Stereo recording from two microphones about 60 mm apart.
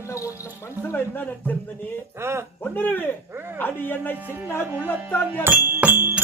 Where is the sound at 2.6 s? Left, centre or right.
Left.